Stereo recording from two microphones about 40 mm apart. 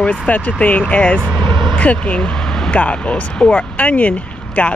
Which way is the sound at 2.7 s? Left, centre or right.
Left.